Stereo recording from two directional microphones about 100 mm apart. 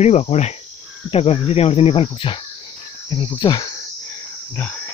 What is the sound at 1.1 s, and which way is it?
Speech, 80° left.